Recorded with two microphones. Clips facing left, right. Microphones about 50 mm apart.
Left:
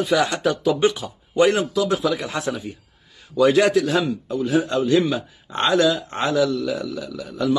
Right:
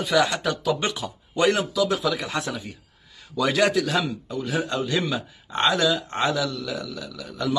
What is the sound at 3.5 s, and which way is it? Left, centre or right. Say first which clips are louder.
Speech: left 4 dB; left.